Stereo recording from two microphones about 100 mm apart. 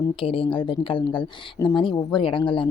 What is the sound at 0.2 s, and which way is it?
Speech, 65° left (ahead or behind).